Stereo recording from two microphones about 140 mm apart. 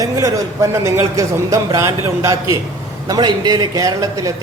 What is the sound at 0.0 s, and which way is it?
A man's voice, 25° right (ahead or behind).